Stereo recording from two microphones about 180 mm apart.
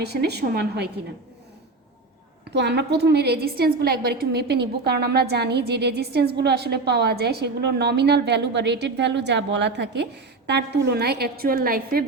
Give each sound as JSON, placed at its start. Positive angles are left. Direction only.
{"t": 0.0, "sound": "a woman's voice", "side_deg": -65}
{"t": 2.5, "sound": "a woman's voice", "side_deg": -70}